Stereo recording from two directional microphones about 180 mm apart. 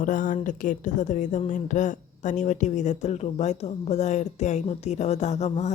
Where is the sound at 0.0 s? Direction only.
45° left (ahead or behind).